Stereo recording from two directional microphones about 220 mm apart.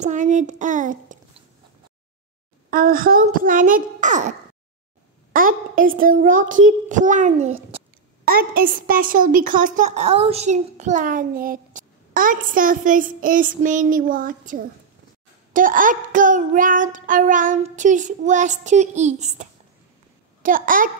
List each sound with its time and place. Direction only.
0.0 s a woman's voice: 35° right (ahead or behind)
2.7 s a woman's voice: 40° right (ahead or behind)
5.3 s a woman's voice: 40° right (ahead or behind)
8.3 s a woman's voice: 40° right (ahead or behind)